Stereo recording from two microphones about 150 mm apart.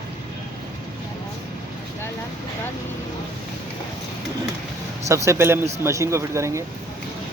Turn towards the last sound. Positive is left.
turn(degrees=-20)  # may be behind; listen again after turning